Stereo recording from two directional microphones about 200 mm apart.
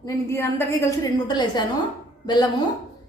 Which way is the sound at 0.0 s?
15° left (ahead or behind).